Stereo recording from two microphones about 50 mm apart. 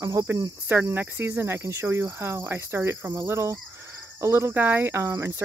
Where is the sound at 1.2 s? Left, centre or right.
Right.